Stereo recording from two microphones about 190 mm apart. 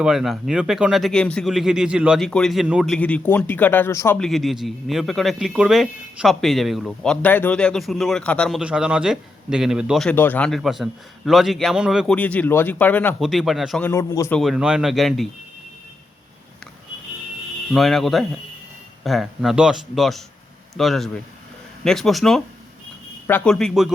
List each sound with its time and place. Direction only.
0.0 s speech: 5° right (ahead or behind); by 4.2 s 15° left (ahead or behind)
4.2 s speech: centre (ahead or behind)
13.9 s a man's voice: 15° left (ahead or behind)
14.3 s speech: centre (ahead or behind)
17.7 s speech: centre (ahead or behind)